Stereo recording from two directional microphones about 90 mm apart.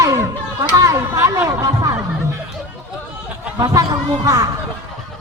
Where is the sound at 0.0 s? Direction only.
35° right (ahead or behind).